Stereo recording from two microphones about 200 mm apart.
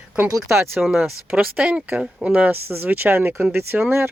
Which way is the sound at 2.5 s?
50° right (ahead or behind).